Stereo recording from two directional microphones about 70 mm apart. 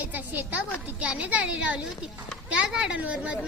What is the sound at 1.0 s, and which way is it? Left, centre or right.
A child's voice, centre.